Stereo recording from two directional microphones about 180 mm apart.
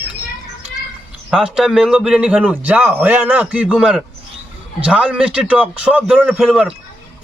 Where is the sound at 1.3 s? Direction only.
5° right (ahead or behind).